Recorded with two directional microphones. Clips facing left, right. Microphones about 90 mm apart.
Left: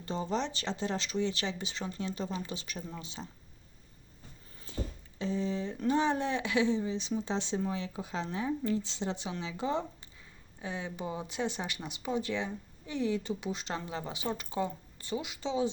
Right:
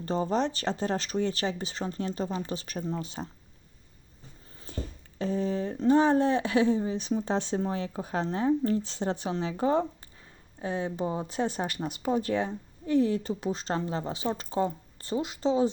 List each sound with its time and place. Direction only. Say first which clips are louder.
0.0 s speech: right 6 dB; 40° right (ahead or behind)
4.7 s music: right 1 dB; 50° right (ahead or behind)
5.2 s a woman's voice: right 4 dB; 45° right (ahead or behind)